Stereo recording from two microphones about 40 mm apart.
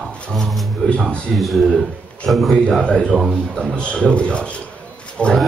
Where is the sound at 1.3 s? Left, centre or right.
Centre.